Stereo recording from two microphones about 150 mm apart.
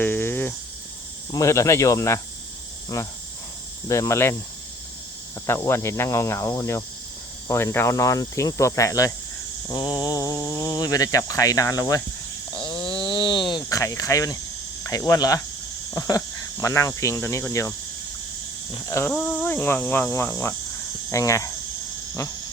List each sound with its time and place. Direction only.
0.0 s a sound: 15° left (ahead or behind)
1.3 s speech: 20° left (ahead or behind)
5.5 s speech: 15° left (ahead or behind)
12.5 s a sound: 30° left (ahead or behind)
14.8 s speech: 20° left (ahead or behind)
18.9 s speech: 20° left (ahead or behind)
19.1 s cricket: 10° left (ahead or behind)
21.1 s speech: 20° left (ahead or behind)